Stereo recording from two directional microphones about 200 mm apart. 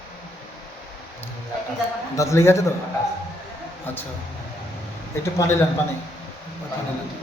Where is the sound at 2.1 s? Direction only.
15° left (ahead or behind).